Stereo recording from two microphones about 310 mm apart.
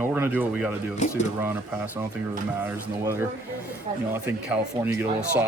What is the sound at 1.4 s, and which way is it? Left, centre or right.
Speech, centre.